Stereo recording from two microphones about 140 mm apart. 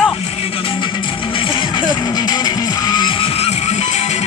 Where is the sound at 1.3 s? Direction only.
30° left (ahead or behind); by 4.0 s 50° left (ahead or behind).